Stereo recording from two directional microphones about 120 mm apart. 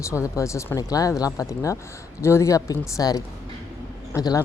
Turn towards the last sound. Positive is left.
turn(degrees=30)  # may be behind; listen again after turning